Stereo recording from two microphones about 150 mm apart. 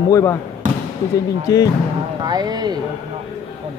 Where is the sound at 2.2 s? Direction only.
25° right (ahead or behind).